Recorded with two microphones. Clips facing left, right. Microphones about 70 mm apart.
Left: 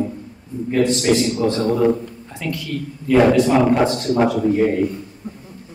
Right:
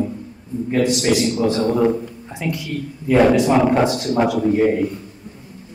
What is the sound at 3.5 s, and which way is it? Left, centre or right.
A man's voice, centre.